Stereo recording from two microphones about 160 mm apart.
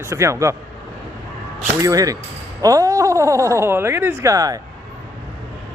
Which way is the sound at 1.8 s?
20° right (ahead or behind).